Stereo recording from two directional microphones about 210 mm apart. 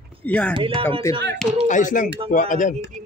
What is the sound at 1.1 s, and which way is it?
Speech, 15° left (ahead or behind).